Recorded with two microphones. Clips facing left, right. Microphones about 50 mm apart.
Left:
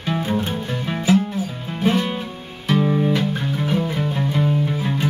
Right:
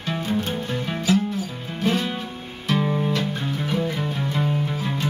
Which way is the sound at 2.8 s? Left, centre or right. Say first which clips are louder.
Left 5 dB; centre.